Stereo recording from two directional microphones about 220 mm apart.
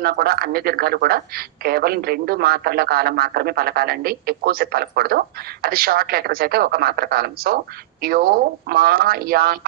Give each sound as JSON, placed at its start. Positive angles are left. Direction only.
{"t": 0.0, "sound": "speech", "side_deg": -45}